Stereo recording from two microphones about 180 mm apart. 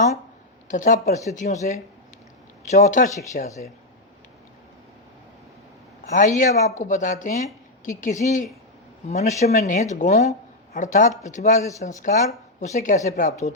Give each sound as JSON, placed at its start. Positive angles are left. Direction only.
{"t": 0.7, "sound": "speech", "side_deg": 45}
{"t": 6.1, "sound": "speech", "side_deg": 45}